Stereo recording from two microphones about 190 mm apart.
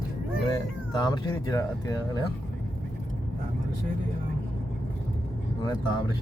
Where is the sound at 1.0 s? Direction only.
20° left (ahead or behind).